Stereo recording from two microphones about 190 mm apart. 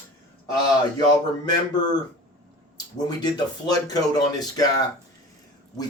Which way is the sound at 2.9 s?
20° left (ahead or behind).